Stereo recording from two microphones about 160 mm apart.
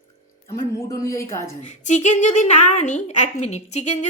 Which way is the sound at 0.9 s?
20° left (ahead or behind).